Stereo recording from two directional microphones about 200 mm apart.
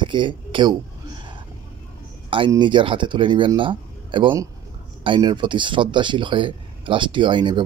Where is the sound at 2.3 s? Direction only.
25° right (ahead or behind).